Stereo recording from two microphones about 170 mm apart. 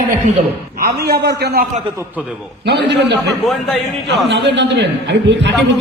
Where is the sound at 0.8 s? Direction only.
70° right (ahead or behind).